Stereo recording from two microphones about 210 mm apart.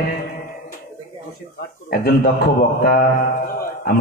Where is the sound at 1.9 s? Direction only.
45° left (ahead or behind).